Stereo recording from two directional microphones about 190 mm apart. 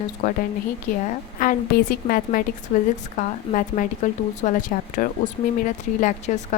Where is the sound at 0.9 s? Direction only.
45° left (ahead or behind).